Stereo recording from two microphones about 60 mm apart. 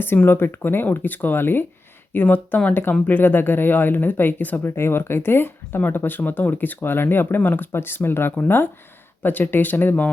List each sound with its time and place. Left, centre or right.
0.3 s speech: left
4.7 s speech: left